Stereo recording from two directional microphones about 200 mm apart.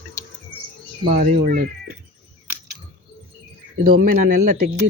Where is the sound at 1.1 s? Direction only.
40° right (ahead or behind).